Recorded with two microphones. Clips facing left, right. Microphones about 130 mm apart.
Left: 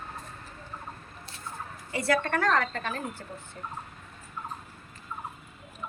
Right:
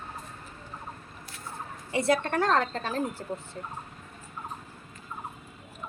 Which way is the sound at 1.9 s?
20° right (ahead or behind).